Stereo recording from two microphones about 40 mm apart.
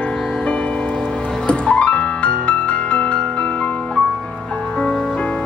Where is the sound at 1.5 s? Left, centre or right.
Left.